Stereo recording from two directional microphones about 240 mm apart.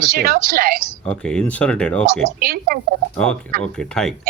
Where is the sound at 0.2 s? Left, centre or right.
Right.